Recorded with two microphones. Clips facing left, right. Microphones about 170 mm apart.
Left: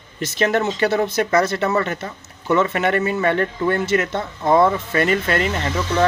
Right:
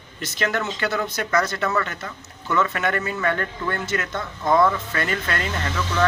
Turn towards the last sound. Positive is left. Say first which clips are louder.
# left 5 dB
turn(degrees=20)  # may be behind; listen again after turning